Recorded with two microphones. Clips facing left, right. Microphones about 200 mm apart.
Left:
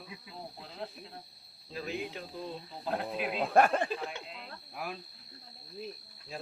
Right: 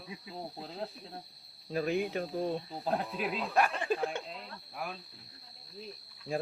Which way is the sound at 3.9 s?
50° right (ahead or behind).